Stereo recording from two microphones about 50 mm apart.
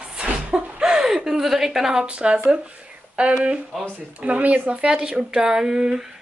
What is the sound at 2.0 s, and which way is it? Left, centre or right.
A woman's voice, right.